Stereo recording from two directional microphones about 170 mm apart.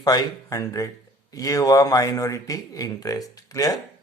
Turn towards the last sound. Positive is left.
turn(degrees=20)  # may be behind; listen again after turning